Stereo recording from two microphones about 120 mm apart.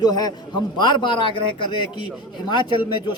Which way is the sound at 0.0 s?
35° left (ahead or behind).